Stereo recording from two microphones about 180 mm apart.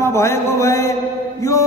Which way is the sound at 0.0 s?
15° left (ahead or behind).